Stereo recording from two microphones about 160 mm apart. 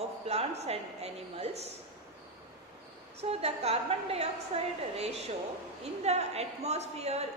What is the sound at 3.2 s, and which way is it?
A woman's voice, 40° right (ahead or behind).